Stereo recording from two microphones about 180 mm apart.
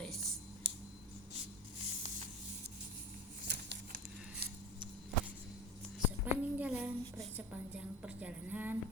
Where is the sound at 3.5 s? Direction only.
70° right (ahead or behind).